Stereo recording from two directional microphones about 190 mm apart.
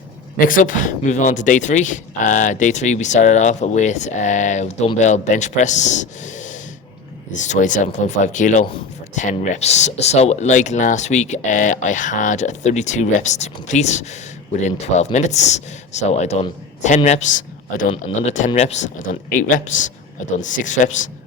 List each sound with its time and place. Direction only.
0.3 s speech: 45° left (ahead or behind)